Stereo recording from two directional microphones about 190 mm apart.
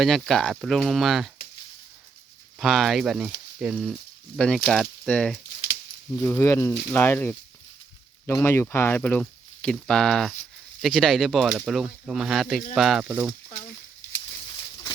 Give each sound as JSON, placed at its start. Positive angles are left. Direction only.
{"t": 0.0, "sound": "speech", "side_deg": 0}
{"t": 2.6, "sound": "speech", "side_deg": 0}